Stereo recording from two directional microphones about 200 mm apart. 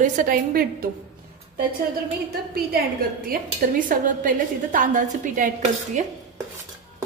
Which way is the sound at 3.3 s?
45° right (ahead or behind).